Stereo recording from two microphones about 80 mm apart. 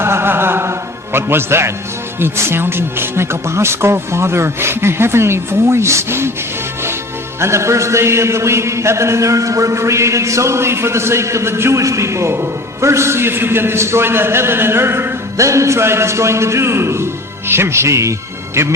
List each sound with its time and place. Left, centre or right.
0.0 s chant: right
2.2 s music: right
7.3 s music: right